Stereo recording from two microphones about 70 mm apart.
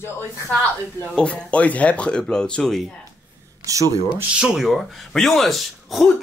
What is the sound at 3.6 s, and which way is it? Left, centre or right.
Speech, right.